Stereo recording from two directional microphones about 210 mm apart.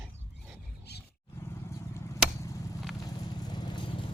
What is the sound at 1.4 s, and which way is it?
Vehicle, 10° left (ahead or behind).